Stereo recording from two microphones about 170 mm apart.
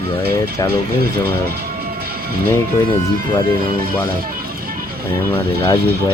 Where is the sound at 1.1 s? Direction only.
65° right (ahead or behind).